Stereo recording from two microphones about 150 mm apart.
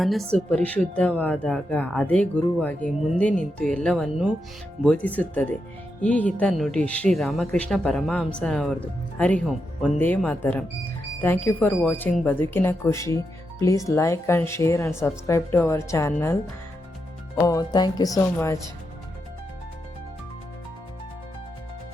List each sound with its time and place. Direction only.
0.0 s speech: centre (ahead or behind)
4.8 s speech: 10° left (ahead or behind)
17.4 s speech: 25° left (ahead or behind)